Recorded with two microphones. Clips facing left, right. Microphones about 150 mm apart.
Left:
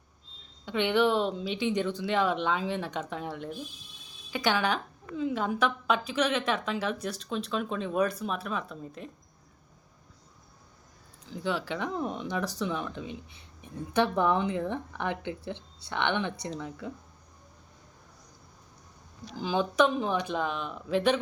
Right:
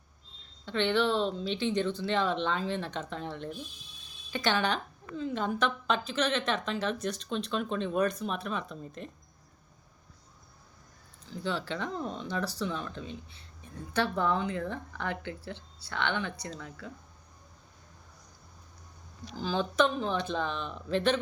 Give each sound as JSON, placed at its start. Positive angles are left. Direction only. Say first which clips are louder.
{"t": 0.6, "sound": "speech", "louder": "left 2 dB", "side_deg": 10}
{"t": 11.3, "sound": "speech", "louder": "left 2 dB", "side_deg": 15}
{"t": 19.4, "sound": "speech", "louder": "left 2 dB", "side_deg": 15}